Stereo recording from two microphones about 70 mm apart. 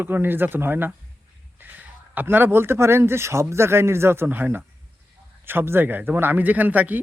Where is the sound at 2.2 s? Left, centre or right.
Right.